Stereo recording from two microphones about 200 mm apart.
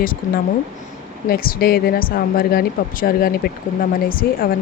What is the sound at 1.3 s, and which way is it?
A woman's voice, 45° left (ahead or behind).